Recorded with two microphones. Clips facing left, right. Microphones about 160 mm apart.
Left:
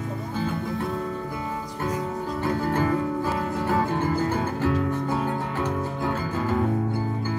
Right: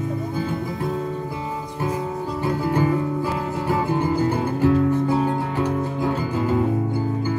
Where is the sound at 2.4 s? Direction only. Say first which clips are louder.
Right 3 dB; 15° right (ahead or behind).